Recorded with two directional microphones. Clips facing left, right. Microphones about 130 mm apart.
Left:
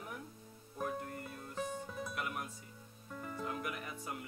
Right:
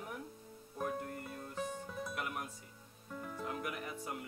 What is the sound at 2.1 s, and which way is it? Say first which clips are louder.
Music: even; 30° right (ahead or behind).